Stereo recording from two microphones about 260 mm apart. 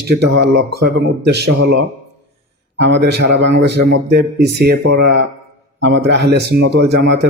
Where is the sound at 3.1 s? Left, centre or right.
Right.